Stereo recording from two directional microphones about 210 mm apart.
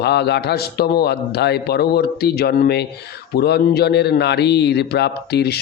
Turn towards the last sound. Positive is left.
turn(degrees=50)  # may be behind; listen again after turning